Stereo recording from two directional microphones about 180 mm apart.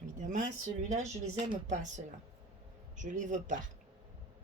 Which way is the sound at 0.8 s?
40° right (ahead or behind).